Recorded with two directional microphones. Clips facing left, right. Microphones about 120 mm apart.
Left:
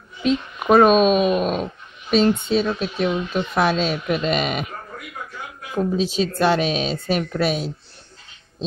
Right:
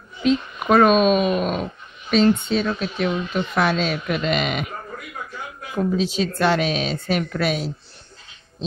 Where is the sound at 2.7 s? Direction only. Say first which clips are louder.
Left 1 dB; 30° left (ahead or behind).